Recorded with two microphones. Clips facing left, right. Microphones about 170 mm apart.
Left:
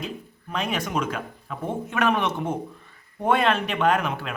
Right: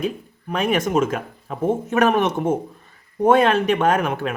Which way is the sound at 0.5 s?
50° right (ahead or behind).